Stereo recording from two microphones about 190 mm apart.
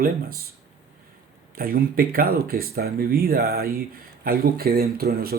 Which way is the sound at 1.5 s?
50° right (ahead or behind).